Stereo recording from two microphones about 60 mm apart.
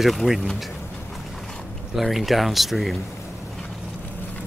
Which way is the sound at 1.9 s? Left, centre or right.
Centre.